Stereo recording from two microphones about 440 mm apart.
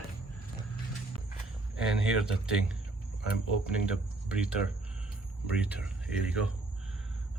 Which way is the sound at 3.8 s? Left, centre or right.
Centre.